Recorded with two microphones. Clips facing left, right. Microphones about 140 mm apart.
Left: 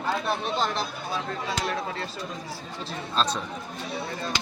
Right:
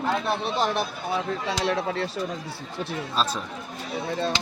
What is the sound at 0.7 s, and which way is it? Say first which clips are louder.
Speech: right 4 dB; 70° right (ahead or behind).